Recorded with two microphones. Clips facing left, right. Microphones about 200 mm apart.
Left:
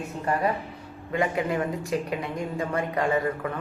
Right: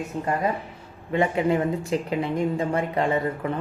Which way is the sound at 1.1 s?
25° right (ahead or behind).